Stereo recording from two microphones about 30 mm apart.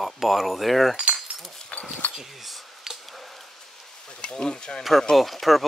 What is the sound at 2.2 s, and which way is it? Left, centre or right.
Speech, centre.